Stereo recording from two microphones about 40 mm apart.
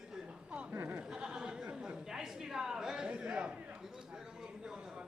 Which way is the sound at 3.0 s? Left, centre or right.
Right.